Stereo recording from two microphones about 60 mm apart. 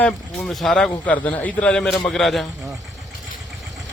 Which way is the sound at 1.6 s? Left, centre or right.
Centre.